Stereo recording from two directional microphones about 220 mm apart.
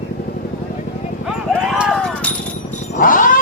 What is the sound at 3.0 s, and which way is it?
Cat, 40° left (ahead or behind).